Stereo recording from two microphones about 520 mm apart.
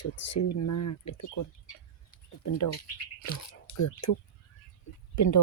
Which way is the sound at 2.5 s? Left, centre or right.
Left.